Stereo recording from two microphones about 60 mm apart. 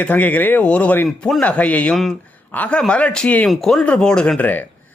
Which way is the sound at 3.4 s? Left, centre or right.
Centre.